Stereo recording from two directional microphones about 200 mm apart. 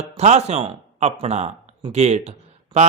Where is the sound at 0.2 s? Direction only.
35° right (ahead or behind).